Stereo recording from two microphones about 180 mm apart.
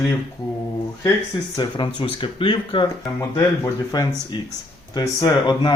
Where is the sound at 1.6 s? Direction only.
25° left (ahead or behind).